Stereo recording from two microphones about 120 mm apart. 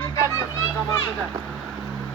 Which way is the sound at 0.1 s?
25° left (ahead or behind).